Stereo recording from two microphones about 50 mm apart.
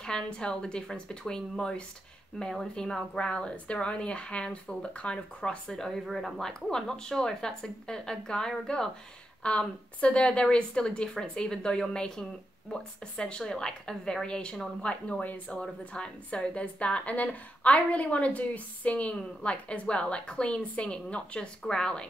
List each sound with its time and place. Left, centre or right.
0.0 s a woman's voice: centre
6.0 s a woman's voice: centre
9.4 s a woman's voice: left